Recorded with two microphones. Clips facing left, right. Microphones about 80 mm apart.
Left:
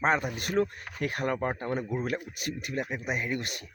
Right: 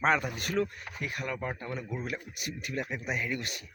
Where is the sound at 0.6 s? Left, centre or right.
Left.